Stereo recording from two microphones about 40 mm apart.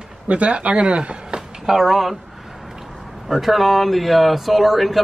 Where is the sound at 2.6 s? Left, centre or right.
Centre.